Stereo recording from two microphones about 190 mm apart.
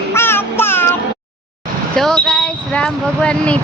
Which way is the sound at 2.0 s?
5° left (ahead or behind).